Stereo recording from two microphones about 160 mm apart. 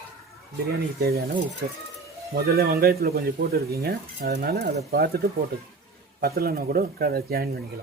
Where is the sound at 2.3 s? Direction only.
75° right (ahead or behind).